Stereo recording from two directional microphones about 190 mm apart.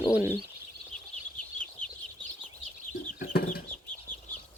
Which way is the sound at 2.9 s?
45° left (ahead or behind).